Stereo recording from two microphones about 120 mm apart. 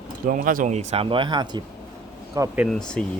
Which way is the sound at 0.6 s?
70° right (ahead or behind).